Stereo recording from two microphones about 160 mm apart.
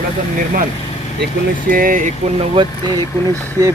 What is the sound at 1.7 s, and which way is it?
Speech, 60° right (ahead or behind).